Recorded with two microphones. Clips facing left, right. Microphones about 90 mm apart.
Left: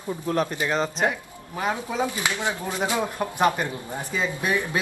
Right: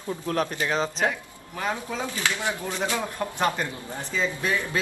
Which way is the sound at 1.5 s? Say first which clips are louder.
Left 3 dB; 15° left (ahead or behind).